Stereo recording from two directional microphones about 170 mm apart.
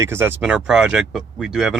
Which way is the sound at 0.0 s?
15° right (ahead or behind).